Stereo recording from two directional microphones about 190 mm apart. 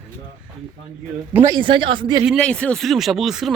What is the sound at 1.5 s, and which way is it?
Speech, 25° right (ahead or behind).